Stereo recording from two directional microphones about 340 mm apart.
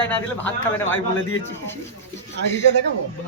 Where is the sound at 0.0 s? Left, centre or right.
Centre.